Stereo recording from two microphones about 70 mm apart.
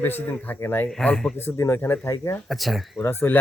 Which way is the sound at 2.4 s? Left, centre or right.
Centre.